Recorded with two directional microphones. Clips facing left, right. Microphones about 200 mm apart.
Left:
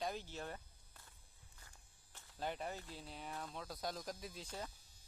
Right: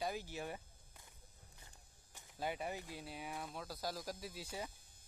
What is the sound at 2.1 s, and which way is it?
Speech, 10° right (ahead or behind).